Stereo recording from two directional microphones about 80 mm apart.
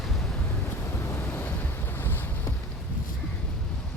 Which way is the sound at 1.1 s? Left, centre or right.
Left.